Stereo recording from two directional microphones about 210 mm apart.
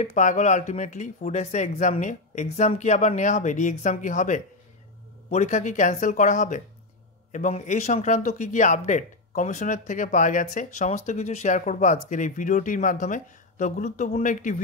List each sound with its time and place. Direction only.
0.0 s speech: 35° left (ahead or behind)